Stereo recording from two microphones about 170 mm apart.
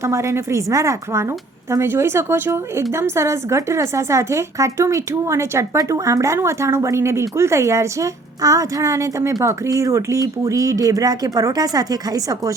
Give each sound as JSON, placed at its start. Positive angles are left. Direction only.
{"t": 0.0, "sound": "a woman's voice", "side_deg": -15}